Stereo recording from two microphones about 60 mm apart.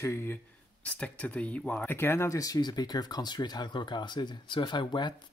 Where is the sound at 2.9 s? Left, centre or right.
Left.